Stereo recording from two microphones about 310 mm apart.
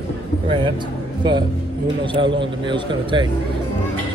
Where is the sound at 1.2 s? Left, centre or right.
Centre.